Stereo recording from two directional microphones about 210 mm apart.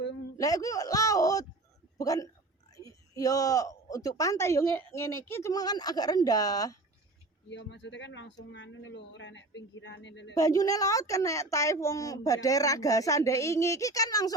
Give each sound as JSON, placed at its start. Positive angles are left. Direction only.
{"t": 0.3, "sound": "speech", "side_deg": 15}
{"t": 7.5, "sound": "speech", "side_deg": 55}
{"t": 10.3, "sound": "speech", "side_deg": 15}